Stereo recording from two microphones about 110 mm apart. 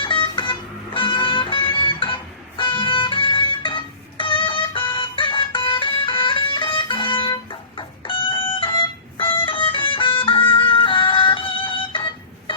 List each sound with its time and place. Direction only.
0.0 s music: 50° left (ahead or behind)